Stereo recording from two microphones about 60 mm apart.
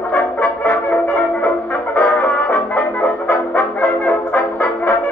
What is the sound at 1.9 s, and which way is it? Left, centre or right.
Music, left.